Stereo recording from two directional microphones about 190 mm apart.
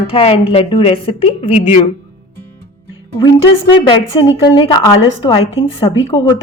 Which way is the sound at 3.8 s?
30° left (ahead or behind).